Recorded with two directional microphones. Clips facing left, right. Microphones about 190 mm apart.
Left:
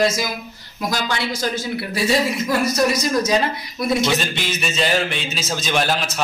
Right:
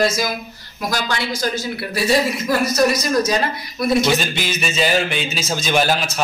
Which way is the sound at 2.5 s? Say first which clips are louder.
Right 3 dB; 20° left (ahead or behind).